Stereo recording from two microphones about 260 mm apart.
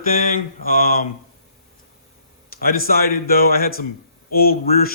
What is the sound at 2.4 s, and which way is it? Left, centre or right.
A man's voice, left.